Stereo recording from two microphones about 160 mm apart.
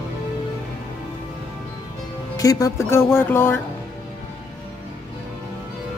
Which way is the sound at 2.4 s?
20° left (ahead or behind).